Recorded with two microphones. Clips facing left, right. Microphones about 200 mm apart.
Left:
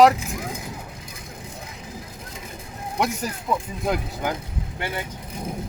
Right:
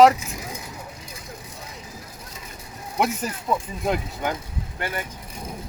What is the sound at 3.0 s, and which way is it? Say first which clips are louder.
Speech: right 1 dB; centre (ahead or behind).